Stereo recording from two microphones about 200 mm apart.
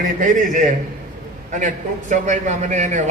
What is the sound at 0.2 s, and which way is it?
A man's voice, 40° right (ahead or behind).